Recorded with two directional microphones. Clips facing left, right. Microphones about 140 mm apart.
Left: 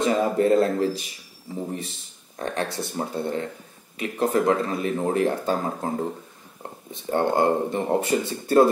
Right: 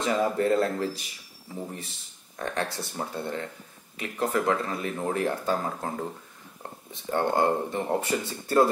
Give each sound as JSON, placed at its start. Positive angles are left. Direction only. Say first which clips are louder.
{"t": 0.0, "sound": "speech", "louder": "left 4 dB", "side_deg": 20}
{"t": 2.3, "sound": "speech", "louder": "left 3 dB", "side_deg": 20}